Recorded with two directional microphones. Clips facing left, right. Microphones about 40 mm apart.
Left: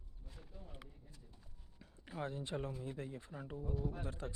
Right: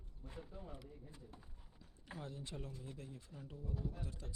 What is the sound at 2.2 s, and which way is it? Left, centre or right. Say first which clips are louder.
Speech: left 9 dB; left.